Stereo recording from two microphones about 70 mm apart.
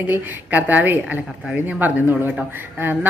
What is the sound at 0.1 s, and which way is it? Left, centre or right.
A woman's voice, right.